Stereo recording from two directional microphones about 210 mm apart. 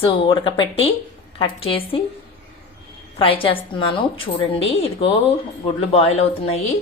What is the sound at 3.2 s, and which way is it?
A woman's voice, 25° left (ahead or behind).